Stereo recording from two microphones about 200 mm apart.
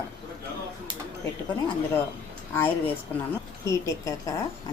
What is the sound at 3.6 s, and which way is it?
Speech, 15° left (ahead or behind).